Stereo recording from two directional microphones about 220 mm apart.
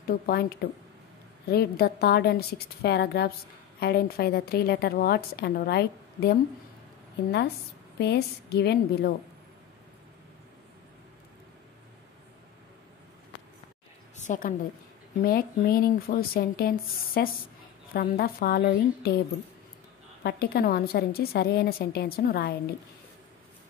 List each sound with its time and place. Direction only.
0.1 s a woman's voice: 45° left (ahead or behind)
14.1 s a sound: 35° left (ahead or behind)
15.2 s a woman's voice: 45° left (ahead or behind)
20.2 s a woman's voice: 45° left (ahead or behind)